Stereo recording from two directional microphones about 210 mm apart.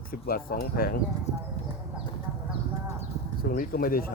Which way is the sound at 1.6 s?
30° left (ahead or behind).